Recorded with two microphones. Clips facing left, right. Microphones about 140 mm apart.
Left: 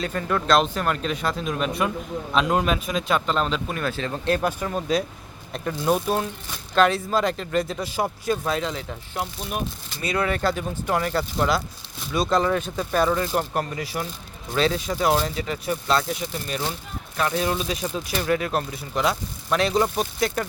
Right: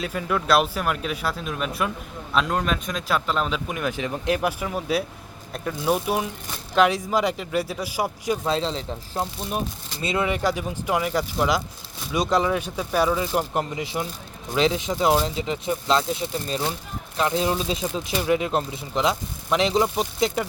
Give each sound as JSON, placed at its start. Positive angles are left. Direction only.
{"t": 0.0, "sound": "a man's voice", "side_deg": -5}
{"t": 8.4, "sound": "speech", "side_deg": -25}